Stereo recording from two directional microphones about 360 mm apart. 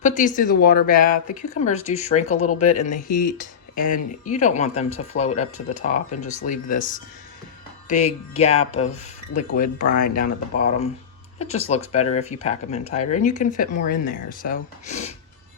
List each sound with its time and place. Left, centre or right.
0.0 s speech: left
2.2 s speech: left
2.5 s speech: centre
3.8 s speech: left
4.3 s speech: left
5.1 s music: centre
5.9 s speech: left
7.9 s music: centre
9.4 s speech: left
11.3 s music: centre
11.9 s speech: centre